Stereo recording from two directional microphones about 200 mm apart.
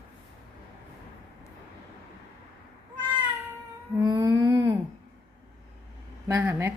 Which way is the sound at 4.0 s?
15° right (ahead or behind).